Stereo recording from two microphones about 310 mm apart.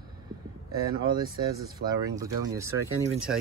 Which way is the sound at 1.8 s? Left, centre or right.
Right.